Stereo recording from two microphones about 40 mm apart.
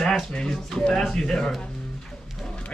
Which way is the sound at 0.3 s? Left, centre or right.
Centre.